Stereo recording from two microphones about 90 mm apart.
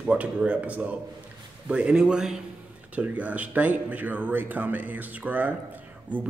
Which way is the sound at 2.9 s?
15° right (ahead or behind).